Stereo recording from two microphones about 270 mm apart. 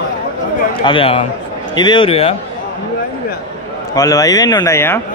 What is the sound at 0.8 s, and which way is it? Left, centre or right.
A man's voice, centre.